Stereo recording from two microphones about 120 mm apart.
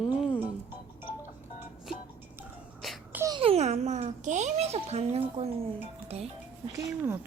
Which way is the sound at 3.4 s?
60° right (ahead or behind).